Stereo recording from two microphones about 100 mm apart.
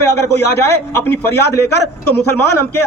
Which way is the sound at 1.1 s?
20° left (ahead or behind).